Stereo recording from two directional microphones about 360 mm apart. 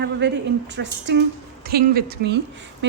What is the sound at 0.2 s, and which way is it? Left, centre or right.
A woman's voice, right.